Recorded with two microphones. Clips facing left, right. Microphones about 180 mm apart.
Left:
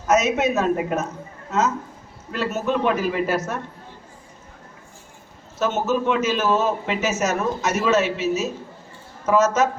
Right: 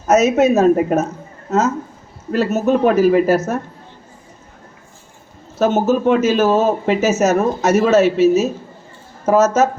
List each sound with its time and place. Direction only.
0.1 s speech: 45° right (ahead or behind)
5.5 s speech: 50° right (ahead or behind)